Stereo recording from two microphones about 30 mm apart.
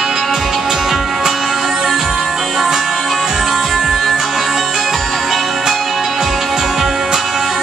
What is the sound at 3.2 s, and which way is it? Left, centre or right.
Music, centre.